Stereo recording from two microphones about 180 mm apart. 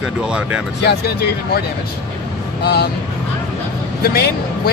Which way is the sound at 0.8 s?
65° left (ahead or behind).